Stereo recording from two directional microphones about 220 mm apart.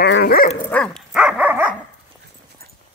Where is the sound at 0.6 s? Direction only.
5° left (ahead or behind).